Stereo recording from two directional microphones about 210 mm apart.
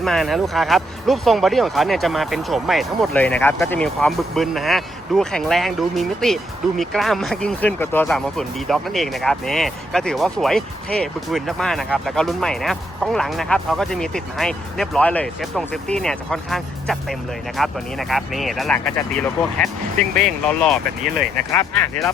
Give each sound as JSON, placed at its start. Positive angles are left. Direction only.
{"t": 0.0, "sound": "speech", "side_deg": 0}
{"t": 21.1, "sound": "speech", "side_deg": -45}